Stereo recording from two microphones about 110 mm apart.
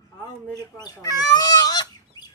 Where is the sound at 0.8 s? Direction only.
35° left (ahead or behind).